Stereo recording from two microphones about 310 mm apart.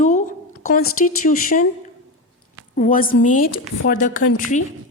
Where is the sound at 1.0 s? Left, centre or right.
Left.